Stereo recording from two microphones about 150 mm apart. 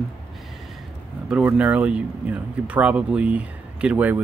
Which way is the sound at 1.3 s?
10° right (ahead or behind).